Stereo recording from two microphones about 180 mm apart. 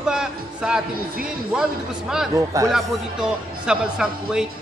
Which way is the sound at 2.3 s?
20° right (ahead or behind).